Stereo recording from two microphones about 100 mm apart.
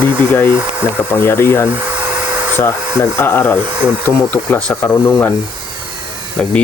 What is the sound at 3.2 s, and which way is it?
Speech, 20° left (ahead or behind).